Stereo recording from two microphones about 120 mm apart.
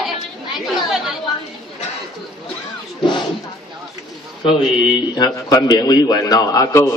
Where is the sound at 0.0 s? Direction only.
Centre (ahead or behind).